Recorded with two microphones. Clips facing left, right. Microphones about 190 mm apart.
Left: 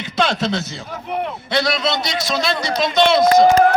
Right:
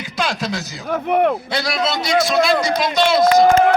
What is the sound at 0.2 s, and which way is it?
Speech, 25° left (ahead or behind).